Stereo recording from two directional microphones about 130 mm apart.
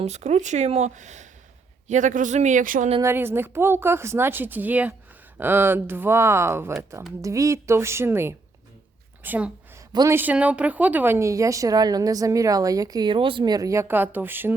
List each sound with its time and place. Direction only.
0.0 s speech: 60° right (ahead or behind); by 2.9 s 85° right
3.0 s speech: 20° right (ahead or behind)
9.2 s a sound: 15° right (ahead or behind)
10.1 s speech: 15° right (ahead or behind)